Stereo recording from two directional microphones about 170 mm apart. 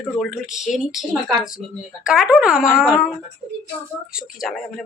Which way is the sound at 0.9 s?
Centre (ahead or behind).